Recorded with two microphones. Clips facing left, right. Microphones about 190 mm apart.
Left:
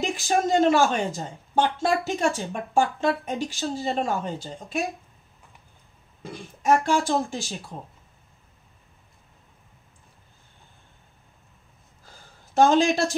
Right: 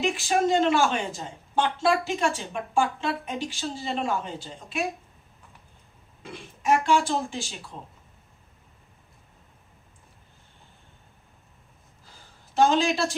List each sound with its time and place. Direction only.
0.0 s speech: 40° left (ahead or behind)
6.3 s speech: 40° left (ahead or behind)
12.5 s speech: 45° left (ahead or behind)